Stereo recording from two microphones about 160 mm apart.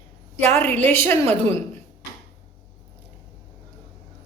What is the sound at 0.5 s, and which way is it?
A woman's voice, 10° left (ahead or behind).